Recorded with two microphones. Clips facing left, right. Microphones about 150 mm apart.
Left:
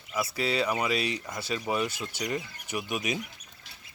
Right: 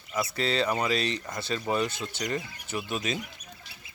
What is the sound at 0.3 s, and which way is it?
Speech, 5° left (ahead or behind).